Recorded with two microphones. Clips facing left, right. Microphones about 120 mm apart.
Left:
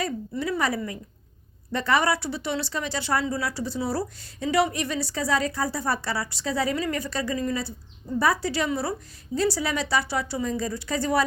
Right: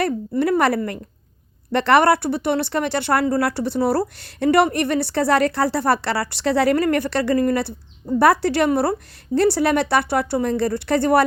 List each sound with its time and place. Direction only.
0.0 s speech: 60° right (ahead or behind)